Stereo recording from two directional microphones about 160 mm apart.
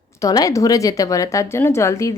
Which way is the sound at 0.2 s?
20° left (ahead or behind).